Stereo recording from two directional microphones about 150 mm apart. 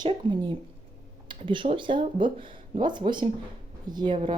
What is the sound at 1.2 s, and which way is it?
Computer keyboard, 35° right (ahead or behind).